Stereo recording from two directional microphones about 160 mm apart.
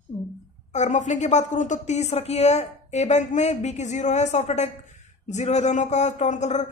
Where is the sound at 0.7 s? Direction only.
45° left (ahead or behind).